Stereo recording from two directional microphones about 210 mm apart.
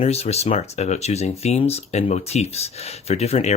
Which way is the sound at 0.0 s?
30° left (ahead or behind).